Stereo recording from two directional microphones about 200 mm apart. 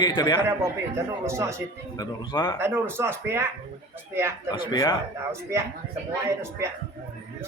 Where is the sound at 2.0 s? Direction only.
20° left (ahead or behind).